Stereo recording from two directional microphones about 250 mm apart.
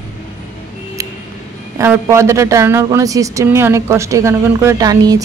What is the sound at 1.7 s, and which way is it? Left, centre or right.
A man's voice, centre.